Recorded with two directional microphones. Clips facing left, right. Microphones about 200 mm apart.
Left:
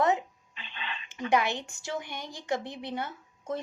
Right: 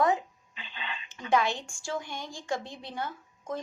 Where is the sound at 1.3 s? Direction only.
20° left (ahead or behind).